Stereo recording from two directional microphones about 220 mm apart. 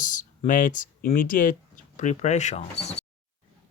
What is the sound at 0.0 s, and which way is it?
Speech, 35° left (ahead or behind).